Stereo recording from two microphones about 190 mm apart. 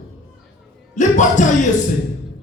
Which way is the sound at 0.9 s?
40° left (ahead or behind).